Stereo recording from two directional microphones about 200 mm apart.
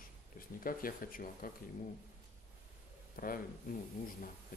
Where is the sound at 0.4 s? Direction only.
45° left (ahead or behind).